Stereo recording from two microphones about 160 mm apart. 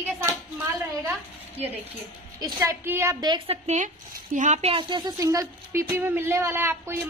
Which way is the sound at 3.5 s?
45° right (ahead or behind).